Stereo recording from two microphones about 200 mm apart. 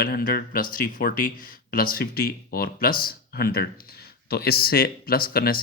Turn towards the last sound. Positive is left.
turn(degrees=50)  # may be behind; listen again after turning